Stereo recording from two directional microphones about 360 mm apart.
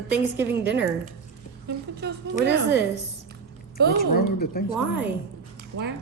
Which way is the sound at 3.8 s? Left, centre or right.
Right.